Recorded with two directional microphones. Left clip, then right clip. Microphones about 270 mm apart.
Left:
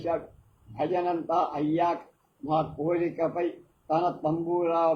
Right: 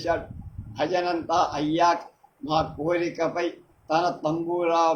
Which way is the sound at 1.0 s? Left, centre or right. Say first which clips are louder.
Right 3 dB; right.